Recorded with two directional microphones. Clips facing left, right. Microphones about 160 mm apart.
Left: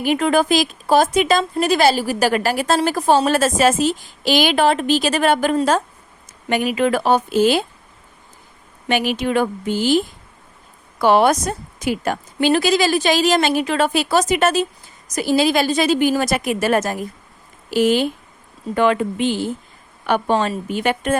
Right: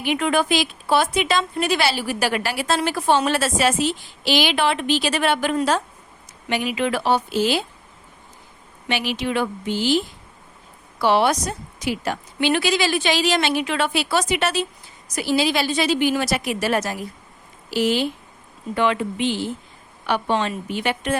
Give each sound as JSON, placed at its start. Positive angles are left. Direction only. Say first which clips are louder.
{"t": 0.0, "sound": "a woman's voice", "louder": "left 4 dB", "side_deg": 40}
{"t": 8.9, "sound": "a woman's voice", "louder": "left 5 dB", "side_deg": 50}
{"t": 11.0, "sound": "a woman's voice", "louder": "left 4 dB", "side_deg": 50}